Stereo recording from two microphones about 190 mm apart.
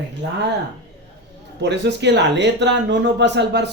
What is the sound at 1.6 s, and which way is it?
Speech, 65° right (ahead or behind).